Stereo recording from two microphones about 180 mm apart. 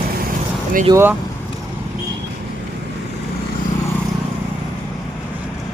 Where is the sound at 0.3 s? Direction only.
50° right (ahead or behind).